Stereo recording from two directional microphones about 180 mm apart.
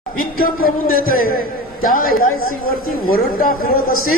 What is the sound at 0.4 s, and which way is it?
A man's voice, 55° left (ahead or behind).